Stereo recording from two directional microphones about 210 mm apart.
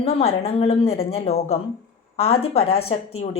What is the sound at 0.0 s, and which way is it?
A woman's voice, 30° left (ahead or behind).